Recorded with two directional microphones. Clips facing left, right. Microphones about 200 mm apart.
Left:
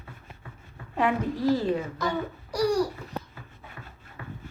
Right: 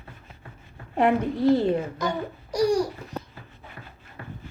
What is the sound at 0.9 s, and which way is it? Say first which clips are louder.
Speech: right 4 dB; 25° right (ahead or behind).